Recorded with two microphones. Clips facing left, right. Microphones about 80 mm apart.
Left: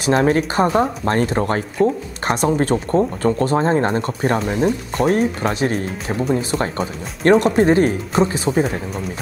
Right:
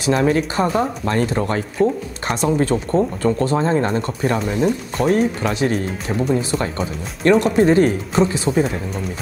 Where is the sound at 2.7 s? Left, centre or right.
Centre.